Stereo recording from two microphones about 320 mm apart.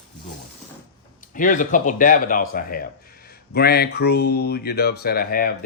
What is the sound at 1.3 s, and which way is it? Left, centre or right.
Speech, left.